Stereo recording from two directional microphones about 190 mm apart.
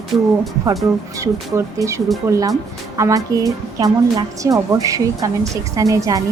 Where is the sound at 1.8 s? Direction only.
15° right (ahead or behind).